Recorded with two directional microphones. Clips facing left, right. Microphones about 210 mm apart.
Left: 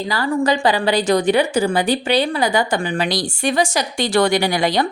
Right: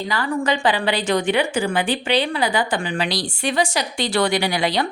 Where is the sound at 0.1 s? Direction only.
40° left (ahead or behind).